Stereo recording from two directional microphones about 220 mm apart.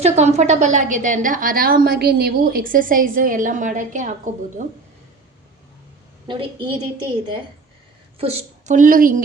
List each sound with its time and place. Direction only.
0.0 s a woman's voice: 30° right (ahead or behind)
6.2 s a woman's voice: 20° right (ahead or behind)
8.2 s a woman's voice: 30° right (ahead or behind)